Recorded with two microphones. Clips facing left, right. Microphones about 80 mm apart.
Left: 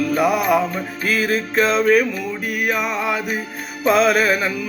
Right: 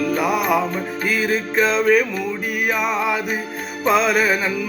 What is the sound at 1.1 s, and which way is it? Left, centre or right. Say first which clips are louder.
Music: left 1 dB; centre.